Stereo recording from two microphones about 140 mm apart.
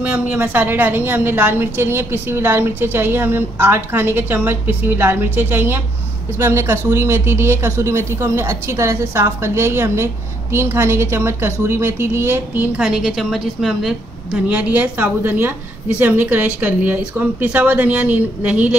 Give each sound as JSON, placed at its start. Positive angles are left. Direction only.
{"t": 0.0, "sound": "a woman's voice", "side_deg": -10}